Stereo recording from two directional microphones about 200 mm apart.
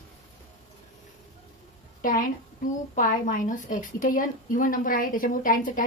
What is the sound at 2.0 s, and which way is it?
A woman's voice, 40° left (ahead or behind).